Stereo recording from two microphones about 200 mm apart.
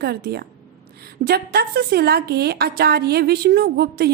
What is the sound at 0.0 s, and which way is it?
A woman's voice, 55° right (ahead or behind).